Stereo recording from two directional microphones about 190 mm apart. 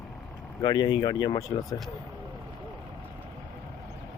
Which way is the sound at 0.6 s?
20° left (ahead or behind).